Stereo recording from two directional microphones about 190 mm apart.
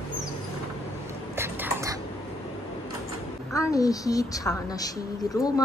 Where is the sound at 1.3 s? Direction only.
15° right (ahead or behind).